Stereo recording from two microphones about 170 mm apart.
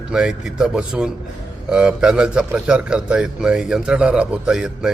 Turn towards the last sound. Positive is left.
turn(degrees=-5)  # may be behind; listen again after turning